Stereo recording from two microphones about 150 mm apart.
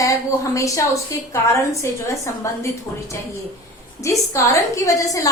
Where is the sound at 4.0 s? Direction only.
20° left (ahead or behind).